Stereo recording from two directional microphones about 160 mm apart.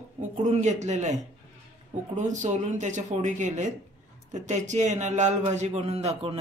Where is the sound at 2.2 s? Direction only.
50° right (ahead or behind).